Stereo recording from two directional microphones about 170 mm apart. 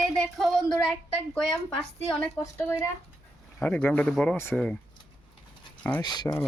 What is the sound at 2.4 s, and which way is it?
A woman's voice, 15° left (ahead or behind).